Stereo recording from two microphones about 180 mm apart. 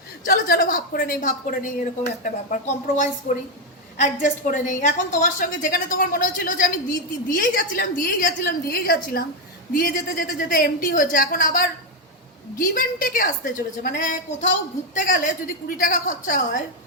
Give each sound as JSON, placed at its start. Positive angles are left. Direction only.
{"t": 0.3, "sound": "a woman's voice", "side_deg": 55}